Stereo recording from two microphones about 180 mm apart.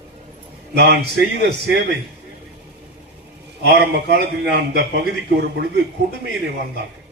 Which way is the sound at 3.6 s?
70° right (ahead or behind).